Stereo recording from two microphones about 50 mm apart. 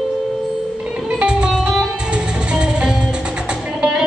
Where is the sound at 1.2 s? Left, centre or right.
Centre.